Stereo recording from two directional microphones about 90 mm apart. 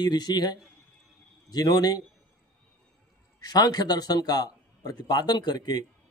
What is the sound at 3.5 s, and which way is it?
Speech, 45° left (ahead or behind).